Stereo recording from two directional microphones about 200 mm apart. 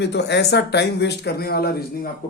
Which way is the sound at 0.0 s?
60° left (ahead or behind).